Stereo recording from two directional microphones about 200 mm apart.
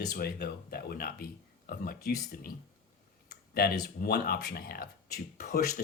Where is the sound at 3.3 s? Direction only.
50° left (ahead or behind).